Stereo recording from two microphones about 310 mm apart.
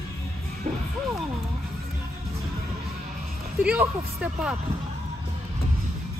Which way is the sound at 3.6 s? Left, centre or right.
Centre.